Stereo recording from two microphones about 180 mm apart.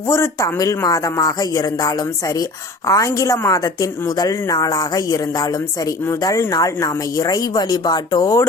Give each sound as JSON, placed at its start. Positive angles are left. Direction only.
{"t": 0.1, "sound": "a woman's voice", "side_deg": 15}